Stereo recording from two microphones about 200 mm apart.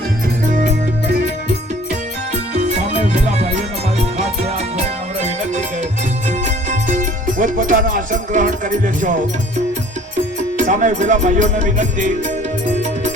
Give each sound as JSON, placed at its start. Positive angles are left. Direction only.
{"t": 2.5, "sound": "music", "side_deg": -35}
{"t": 10.6, "sound": "music", "side_deg": -40}